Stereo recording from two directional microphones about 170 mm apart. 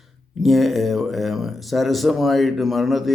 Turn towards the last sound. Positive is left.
turn(degrees=0)  # may be behind; listen again after turning